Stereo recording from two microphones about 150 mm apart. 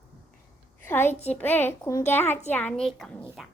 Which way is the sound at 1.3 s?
10° left (ahead or behind).